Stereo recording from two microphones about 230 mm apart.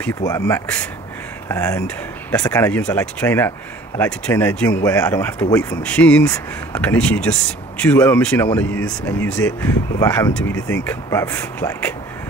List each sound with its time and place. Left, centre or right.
0.2 s speech: centre